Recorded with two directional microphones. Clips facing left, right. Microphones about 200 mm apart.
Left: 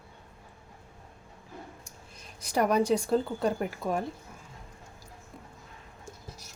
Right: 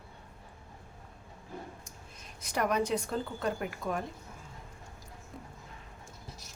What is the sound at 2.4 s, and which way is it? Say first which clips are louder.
Speech: left 5 dB; 35° left (ahead or behind).